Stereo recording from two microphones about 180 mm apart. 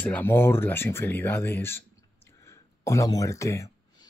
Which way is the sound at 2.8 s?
15° left (ahead or behind).